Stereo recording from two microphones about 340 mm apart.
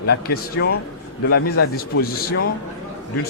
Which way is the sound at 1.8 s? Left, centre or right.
Left.